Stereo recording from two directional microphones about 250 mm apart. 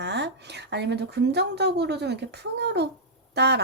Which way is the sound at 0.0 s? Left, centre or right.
Right.